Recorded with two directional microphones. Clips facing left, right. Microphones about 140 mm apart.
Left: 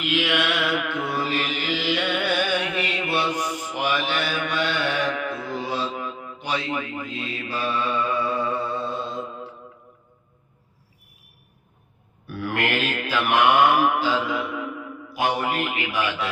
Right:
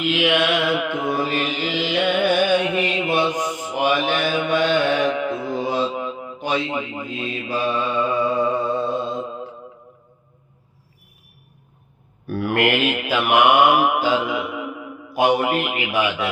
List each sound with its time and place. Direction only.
0.0 s mantra: 20° right (ahead or behind)
12.5 s mantra: 15° right (ahead or behind)
15.2 s a man's voice: 15° right (ahead or behind)
16.0 s mantra: 20° right (ahead or behind)